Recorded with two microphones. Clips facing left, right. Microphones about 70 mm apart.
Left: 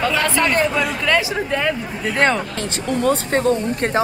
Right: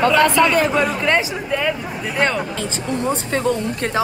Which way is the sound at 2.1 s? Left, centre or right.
Centre.